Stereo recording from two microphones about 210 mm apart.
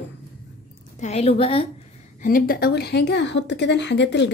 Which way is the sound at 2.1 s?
40° left (ahead or behind).